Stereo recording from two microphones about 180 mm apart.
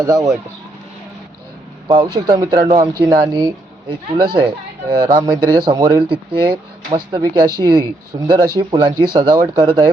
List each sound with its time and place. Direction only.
0.0 s speech: 20° right (ahead or behind)
1.9 s speech: 25° right (ahead or behind)